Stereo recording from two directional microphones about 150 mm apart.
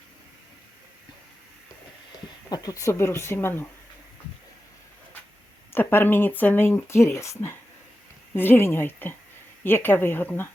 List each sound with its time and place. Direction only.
2.5 s speech: 25° left (ahead or behind)
5.7 s speech: 15° left (ahead or behind)